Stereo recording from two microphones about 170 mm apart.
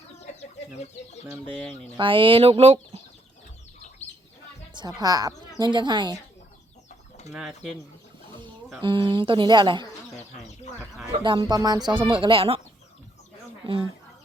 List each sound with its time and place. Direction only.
2.0 s speech: 30° right (ahead or behind)
4.7 s a woman's voice: 25° right (ahead or behind)
7.3 s speech: centre (ahead or behind)
8.8 s speech: 30° right (ahead or behind)
10.3 s a sound: 45° left (ahead or behind)
10.8 s speech: 5° right (ahead or behind)
11.2 s speech: 30° right (ahead or behind)